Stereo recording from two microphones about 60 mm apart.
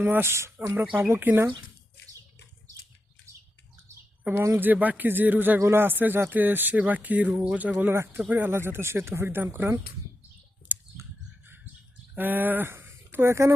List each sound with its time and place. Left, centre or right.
0.0 s speech: right
0.5 s speech: right
4.2 s speech: right
5.5 s speech: right
7.9 s speech: right
8.3 s speech: right
8.5 s speech: right
11.4 s bird: right
12.1 s speech: right